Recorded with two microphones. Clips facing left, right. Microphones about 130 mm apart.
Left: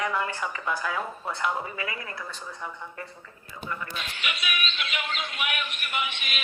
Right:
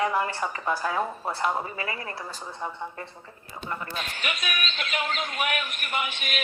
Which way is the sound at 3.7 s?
40° right (ahead or behind).